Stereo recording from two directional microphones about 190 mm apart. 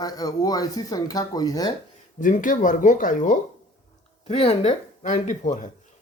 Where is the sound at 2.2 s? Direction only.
45° left (ahead or behind).